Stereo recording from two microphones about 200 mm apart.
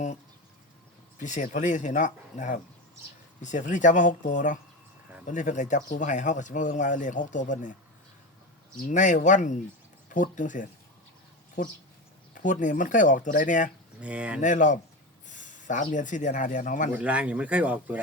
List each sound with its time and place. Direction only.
1.2 s speech: 35° left (ahead or behind)
8.9 s speech: 40° left (ahead or behind)
14.0 s speech: 5° right (ahead or behind)
14.4 s speech: 40° left (ahead or behind)
16.9 s speech: 5° right (ahead or behind)